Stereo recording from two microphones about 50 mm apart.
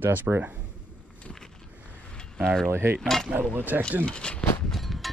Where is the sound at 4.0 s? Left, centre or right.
Centre.